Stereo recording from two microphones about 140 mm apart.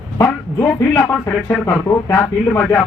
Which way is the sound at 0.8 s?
20° left (ahead or behind).